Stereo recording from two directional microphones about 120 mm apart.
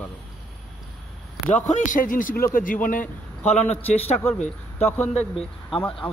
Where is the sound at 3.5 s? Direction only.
70° left (ahead or behind).